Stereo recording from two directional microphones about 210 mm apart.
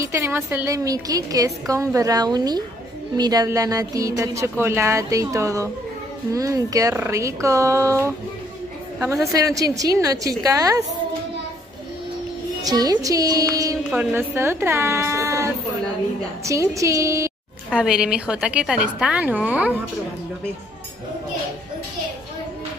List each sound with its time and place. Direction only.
0.0 s speech: 15° right (ahead or behind)
9.3 s speech: 15° right (ahead or behind)
12.6 s speech: 20° right (ahead or behind)
17.6 s a woman's voice: 5° right (ahead or behind)